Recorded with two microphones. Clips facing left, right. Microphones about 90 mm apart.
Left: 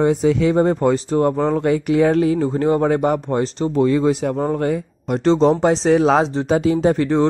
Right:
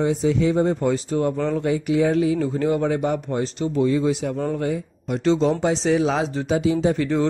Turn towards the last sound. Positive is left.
turn(degrees=50)  # may be behind; listen again after turning